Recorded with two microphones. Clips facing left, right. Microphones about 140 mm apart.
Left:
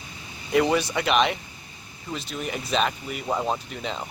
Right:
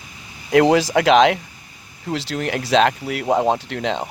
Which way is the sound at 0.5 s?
90° right.